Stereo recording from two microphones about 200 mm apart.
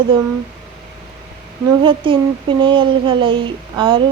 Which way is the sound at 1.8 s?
25° right (ahead or behind).